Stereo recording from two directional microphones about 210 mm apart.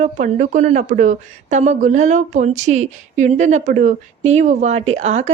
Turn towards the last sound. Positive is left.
turn(degrees=-35)  # may be behind; listen again after turning